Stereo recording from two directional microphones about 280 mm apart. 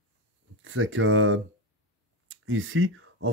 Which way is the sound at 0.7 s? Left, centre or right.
Right.